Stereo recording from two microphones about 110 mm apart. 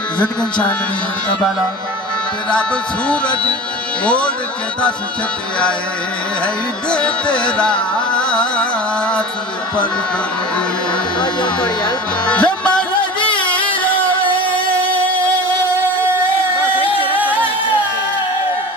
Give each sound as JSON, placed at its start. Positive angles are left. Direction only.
{"t": 0.2, "sound": "music", "side_deg": 10}
{"t": 3.1, "sound": "music", "side_deg": 10}
{"t": 6.9, "sound": "music", "side_deg": 10}
{"t": 11.2, "sound": "speech", "side_deg": 45}
{"t": 12.3, "sound": "music", "side_deg": 10}
{"t": 16.7, "sound": "a sound", "side_deg": 55}